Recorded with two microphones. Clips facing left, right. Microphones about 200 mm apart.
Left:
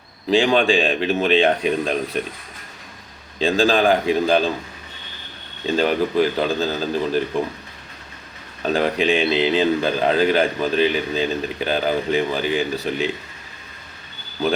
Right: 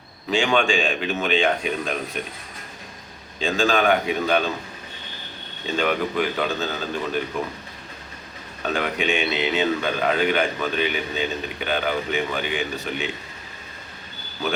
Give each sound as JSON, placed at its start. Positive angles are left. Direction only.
{"t": 0.3, "sound": "speech", "side_deg": 35}
{"t": 3.4, "sound": "speech", "side_deg": 35}
{"t": 5.7, "sound": "speech", "side_deg": 35}
{"t": 8.6, "sound": "speech", "side_deg": 35}